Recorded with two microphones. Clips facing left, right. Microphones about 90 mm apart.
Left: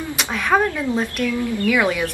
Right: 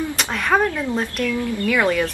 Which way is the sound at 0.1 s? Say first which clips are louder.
Left 4 dB; centre (ahead or behind).